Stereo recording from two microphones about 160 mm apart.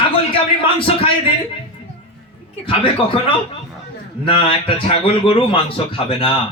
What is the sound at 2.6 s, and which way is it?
A man's voice, 35° left (ahead or behind).